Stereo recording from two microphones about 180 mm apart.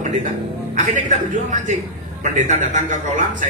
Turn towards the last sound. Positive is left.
turn(degrees=-45)  # may be behind; listen again after turning